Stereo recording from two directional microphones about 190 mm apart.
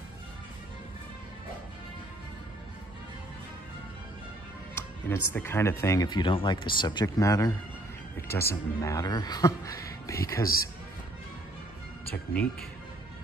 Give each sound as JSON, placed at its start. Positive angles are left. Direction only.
{"t": 4.7, "sound": "speech", "side_deg": 10}
{"t": 10.4, "sound": "a man's voice", "side_deg": 50}